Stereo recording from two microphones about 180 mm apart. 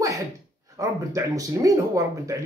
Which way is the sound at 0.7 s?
20° right (ahead or behind).